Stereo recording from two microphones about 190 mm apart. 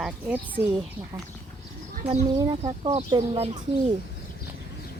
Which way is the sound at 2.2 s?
20° right (ahead or behind).